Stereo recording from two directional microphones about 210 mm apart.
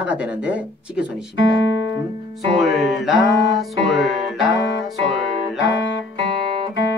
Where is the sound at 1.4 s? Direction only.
60° left (ahead or behind).